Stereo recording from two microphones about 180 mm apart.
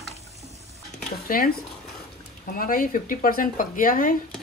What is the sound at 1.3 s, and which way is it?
Speech, 50° left (ahead or behind).